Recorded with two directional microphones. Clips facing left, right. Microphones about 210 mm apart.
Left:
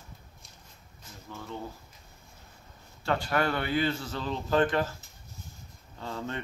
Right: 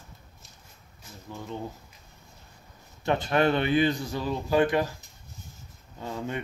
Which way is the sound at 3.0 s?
20° right (ahead or behind).